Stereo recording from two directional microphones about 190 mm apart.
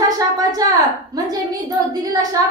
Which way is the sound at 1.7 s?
20° right (ahead or behind).